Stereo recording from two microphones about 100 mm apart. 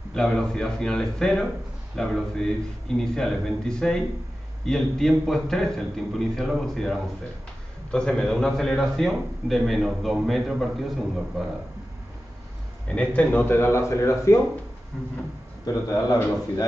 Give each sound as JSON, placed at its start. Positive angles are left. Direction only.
{"t": 0.1, "sound": "a man's voice", "side_deg": 5}
{"t": 12.8, "sound": "a man's voice", "side_deg": 10}
{"t": 15.6, "sound": "speech", "side_deg": 40}